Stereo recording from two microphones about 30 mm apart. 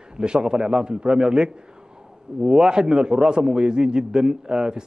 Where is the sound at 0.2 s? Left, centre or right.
Right.